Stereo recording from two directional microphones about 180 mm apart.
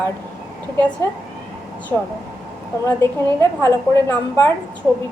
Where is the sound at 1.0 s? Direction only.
15° left (ahead or behind).